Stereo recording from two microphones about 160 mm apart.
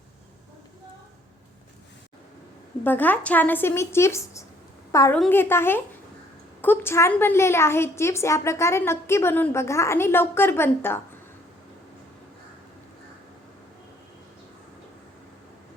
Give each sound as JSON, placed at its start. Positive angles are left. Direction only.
{"t": 2.8, "sound": "a woman's voice", "side_deg": 10}